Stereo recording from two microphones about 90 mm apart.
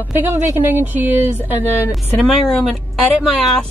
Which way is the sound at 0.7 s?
20° right (ahead or behind).